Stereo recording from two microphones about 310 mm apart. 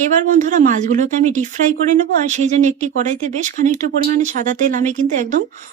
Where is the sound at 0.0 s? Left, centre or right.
Right.